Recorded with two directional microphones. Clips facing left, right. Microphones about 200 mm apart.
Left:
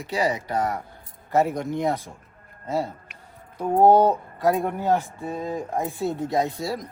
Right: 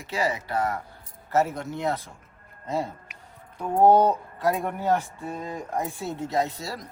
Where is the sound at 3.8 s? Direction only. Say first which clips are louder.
Left 1 dB; 15° left (ahead or behind).